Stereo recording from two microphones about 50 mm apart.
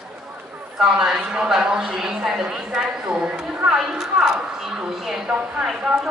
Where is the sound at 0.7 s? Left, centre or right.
Centre.